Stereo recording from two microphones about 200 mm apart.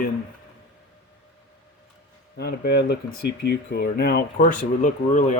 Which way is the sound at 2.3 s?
55° left (ahead or behind).